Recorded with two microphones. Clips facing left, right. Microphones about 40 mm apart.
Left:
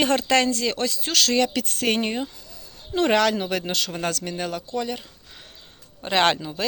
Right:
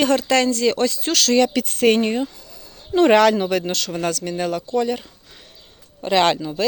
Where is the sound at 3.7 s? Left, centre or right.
Centre.